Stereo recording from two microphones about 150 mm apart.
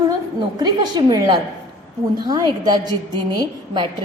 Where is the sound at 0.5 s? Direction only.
25° right (ahead or behind).